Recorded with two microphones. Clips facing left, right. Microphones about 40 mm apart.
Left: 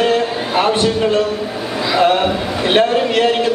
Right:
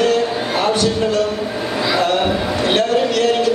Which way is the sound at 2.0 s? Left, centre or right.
Left.